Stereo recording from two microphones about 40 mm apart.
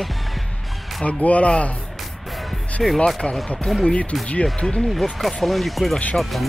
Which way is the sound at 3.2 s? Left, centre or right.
Left.